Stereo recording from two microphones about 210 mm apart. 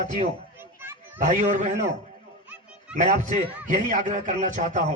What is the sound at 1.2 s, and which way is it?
Speech, 35° right (ahead or behind).